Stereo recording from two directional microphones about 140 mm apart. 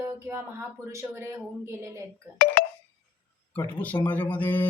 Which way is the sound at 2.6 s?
90° left.